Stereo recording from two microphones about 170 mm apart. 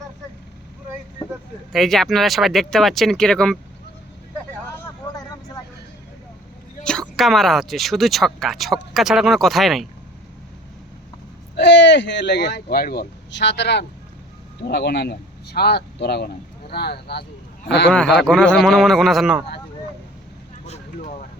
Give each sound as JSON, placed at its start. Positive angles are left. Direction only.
{"t": 1.7, "sound": "speech", "side_deg": 0}
{"t": 7.2, "sound": "speech", "side_deg": 0}
{"t": 11.5, "sound": "speech", "side_deg": 90}
{"t": 14.7, "sound": "speech", "side_deg": 75}
{"t": 17.7, "sound": "a man's voice", "side_deg": 85}
{"t": 17.9, "sound": "speech", "side_deg": 5}